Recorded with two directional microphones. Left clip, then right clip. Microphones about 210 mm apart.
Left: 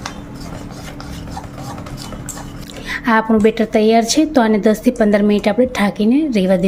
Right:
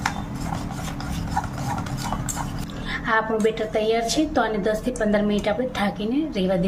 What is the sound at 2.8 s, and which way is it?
A woman's voice, 40° left (ahead or behind).